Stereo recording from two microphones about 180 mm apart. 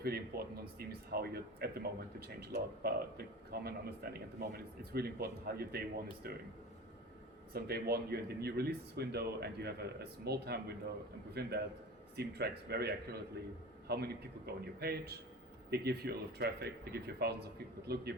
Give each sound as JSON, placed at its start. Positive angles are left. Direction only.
{"t": 0.0, "sound": "speech", "side_deg": -60}
{"t": 7.5, "sound": "speech", "side_deg": -60}